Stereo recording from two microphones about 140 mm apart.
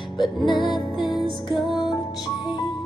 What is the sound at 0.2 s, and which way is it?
Music, 35° left (ahead or behind).